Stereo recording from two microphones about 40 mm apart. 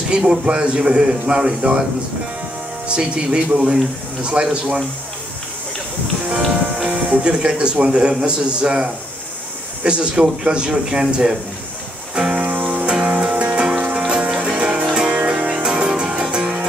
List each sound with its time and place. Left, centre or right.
0.1 s a man's voice: right
2.9 s a man's voice: right
4.2 s a man's voice: right
6.4 s music: centre
7.2 s a man's voice: right
12.5 s music: right
12.8 s music: right